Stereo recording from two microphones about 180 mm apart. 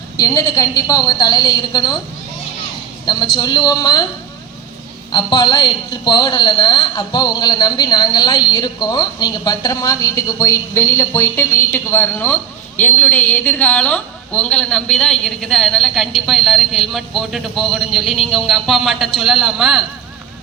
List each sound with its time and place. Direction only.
0.2 s a woman's voice: 20° left (ahead or behind)
3.3 s a woman's voice: 25° left (ahead or behind)
5.1 s a woman's voice: 25° left (ahead or behind); by 19.8 s 5° right (ahead or behind)